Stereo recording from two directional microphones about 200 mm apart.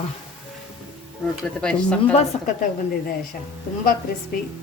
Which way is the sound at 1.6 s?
5° left (ahead or behind).